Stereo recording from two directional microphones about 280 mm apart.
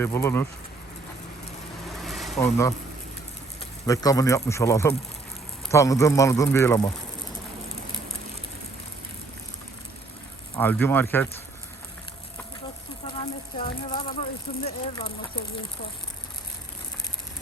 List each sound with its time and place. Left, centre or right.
0.0 s a man's voice: centre
1.9 s a sound: centre
3.8 s a man's voice: centre
10.5 s a man's voice: centre
13.6 s speech: centre